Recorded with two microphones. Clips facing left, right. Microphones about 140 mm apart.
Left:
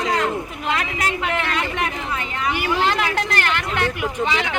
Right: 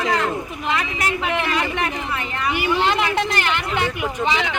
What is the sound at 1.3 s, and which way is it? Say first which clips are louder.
Speech: right 1 dB; 5° right (ahead or behind).